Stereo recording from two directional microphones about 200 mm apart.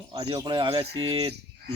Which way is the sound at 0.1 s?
30° right (ahead or behind).